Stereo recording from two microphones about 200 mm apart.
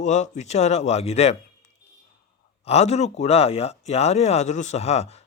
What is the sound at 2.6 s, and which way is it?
Speech, 30° left (ahead or behind).